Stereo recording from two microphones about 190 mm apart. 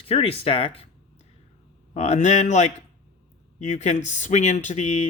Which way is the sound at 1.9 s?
40° left (ahead or behind).